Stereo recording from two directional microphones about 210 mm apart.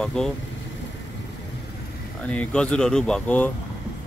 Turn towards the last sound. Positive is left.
turn(degrees=5)  # may be behind; listen again after turning